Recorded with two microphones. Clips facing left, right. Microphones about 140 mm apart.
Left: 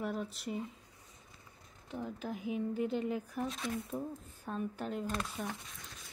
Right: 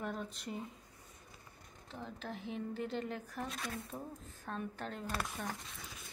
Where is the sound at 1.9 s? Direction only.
5° left (ahead or behind).